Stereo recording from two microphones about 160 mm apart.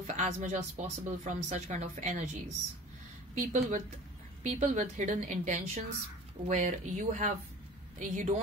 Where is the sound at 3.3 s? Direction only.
50° right (ahead or behind).